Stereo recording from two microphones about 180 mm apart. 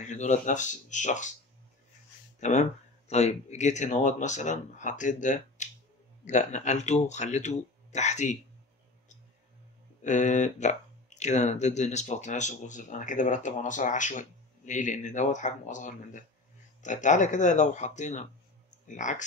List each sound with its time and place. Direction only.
0.0 s speech: 40° left (ahead or behind)
2.4 s speech: 40° left (ahead or behind)
10.0 s speech: 40° left (ahead or behind)